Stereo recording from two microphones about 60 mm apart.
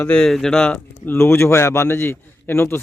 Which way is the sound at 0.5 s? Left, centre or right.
Left.